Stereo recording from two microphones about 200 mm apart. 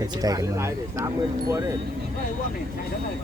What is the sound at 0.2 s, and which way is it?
Speech, 15° right (ahead or behind).